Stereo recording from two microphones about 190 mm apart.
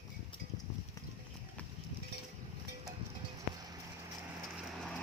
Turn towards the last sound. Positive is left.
turn(degrees=5)  # may be behind; listen again after turning